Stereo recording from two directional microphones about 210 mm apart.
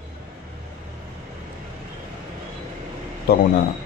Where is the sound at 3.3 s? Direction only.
45° left (ahead or behind).